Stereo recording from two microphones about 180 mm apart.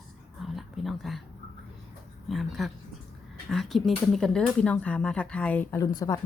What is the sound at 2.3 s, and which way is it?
Speech, centre (ahead or behind).